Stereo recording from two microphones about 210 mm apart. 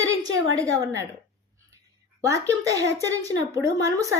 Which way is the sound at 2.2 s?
15° right (ahead or behind).